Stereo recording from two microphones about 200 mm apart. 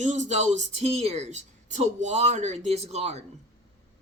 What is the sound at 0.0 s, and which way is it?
Speech, 35° right (ahead or behind).